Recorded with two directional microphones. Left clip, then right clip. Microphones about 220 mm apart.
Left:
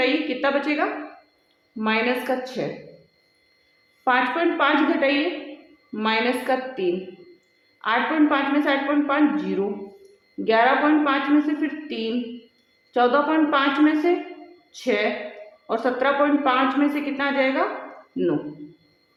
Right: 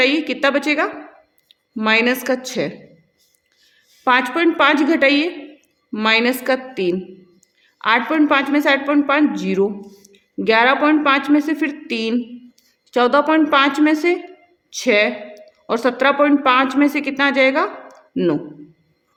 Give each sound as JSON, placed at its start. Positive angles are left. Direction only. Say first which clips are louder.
{"t": 0.4, "sound": "a woman's voice", "louder": "right 6 dB", "side_deg": -45}
{"t": 4.0, "sound": "a woman's voice", "louder": "right 5 dB", "side_deg": -45}